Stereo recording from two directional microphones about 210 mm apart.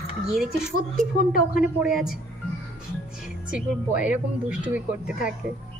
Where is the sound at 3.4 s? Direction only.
5° right (ahead or behind).